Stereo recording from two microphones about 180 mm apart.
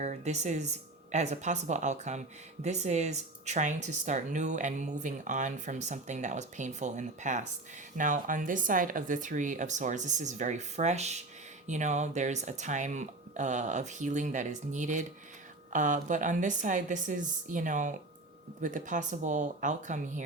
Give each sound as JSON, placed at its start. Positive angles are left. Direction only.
{"t": 0.0, "sound": "speech", "side_deg": -40}